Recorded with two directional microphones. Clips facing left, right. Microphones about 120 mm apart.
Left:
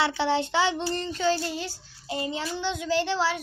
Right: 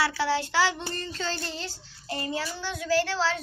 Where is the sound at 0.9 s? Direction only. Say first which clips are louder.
Left 7 dB; 15° left (ahead or behind).